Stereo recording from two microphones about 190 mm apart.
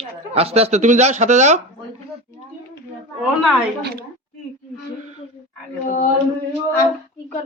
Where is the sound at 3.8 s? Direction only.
55° right (ahead or behind).